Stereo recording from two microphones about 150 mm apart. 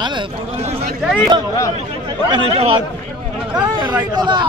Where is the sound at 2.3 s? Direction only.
40° right (ahead or behind).